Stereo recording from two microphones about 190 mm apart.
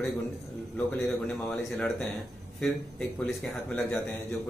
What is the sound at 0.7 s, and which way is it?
A man's voice, 10° left (ahead or behind).